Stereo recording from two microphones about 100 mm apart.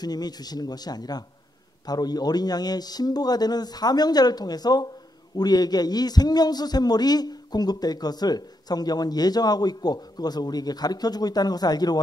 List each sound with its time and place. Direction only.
0.0 s a man's voice: 40° left (ahead or behind)